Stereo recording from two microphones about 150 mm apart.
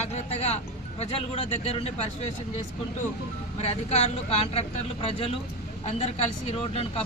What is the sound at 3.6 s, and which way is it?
Speech, 45° left (ahead or behind).